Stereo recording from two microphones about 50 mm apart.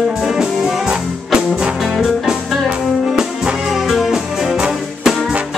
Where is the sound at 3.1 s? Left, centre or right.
Centre.